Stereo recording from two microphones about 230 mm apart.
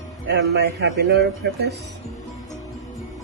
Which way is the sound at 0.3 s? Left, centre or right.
Right.